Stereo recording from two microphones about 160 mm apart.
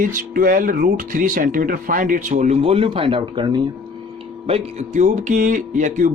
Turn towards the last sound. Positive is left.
turn(degrees=-55)  # may be behind; listen again after turning